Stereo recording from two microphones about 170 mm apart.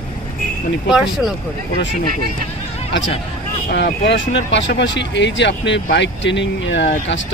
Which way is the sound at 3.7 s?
90° left.